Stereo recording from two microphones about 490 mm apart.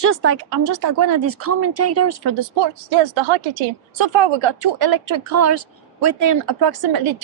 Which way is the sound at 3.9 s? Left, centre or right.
Right.